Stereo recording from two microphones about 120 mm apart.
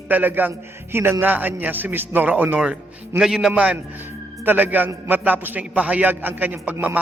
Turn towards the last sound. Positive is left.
turn(degrees=-15)  # may be behind; listen again after turning